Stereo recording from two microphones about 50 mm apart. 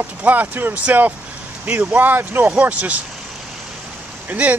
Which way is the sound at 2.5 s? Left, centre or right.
Right.